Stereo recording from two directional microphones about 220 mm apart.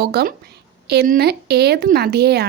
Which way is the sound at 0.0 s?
45° right (ahead or behind).